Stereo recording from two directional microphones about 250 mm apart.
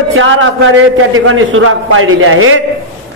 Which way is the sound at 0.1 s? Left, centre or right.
Right.